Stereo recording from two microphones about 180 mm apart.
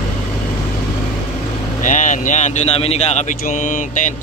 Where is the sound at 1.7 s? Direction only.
45° left (ahead or behind).